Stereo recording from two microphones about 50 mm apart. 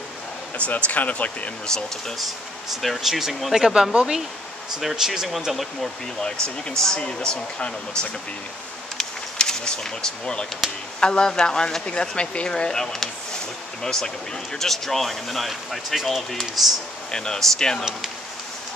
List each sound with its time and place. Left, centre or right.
0.6 s speech: left
1.7 s speech: centre
2.7 s speech: centre
3.6 s speech: centre
6.8 s speech: centre
8.9 s a sound: centre
10.6 s speech: centre
11.0 s speech: centre